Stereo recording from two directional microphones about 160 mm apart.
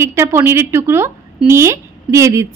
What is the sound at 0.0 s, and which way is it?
A woman's voice, 15° right (ahead or behind).